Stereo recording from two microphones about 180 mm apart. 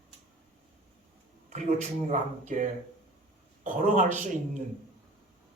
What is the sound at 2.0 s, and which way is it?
Speech, 45° right (ahead or behind).